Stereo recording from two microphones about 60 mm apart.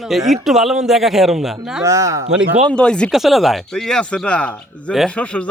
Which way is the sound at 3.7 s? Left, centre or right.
Centre.